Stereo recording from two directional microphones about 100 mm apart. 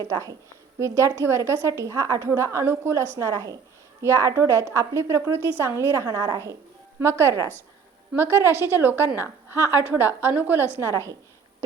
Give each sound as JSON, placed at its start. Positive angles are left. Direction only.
{"t": 0.0, "sound": "a woman's voice", "side_deg": -35}
{"t": 10.8, "sound": "a woman's voice", "side_deg": -30}